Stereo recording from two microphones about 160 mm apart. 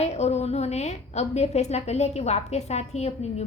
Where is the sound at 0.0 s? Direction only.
45° left (ahead or behind).